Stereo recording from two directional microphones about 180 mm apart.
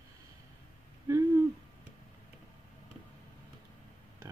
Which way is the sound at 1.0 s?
15° right (ahead or behind).